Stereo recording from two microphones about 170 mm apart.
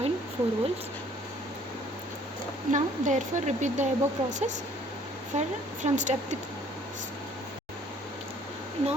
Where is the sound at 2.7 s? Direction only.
45° right (ahead or behind).